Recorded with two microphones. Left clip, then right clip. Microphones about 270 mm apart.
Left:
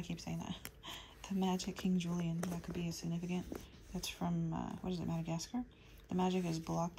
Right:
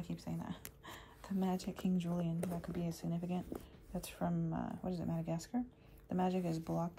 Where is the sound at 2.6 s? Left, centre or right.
Left.